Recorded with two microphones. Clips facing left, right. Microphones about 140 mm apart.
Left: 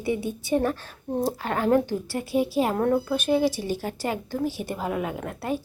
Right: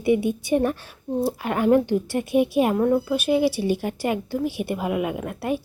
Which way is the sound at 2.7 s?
5° right (ahead or behind).